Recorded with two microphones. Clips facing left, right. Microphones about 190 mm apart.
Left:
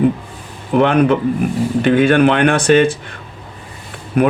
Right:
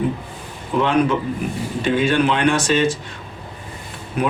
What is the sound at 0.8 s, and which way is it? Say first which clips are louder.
Speech: left 5 dB; 60° left (ahead or behind).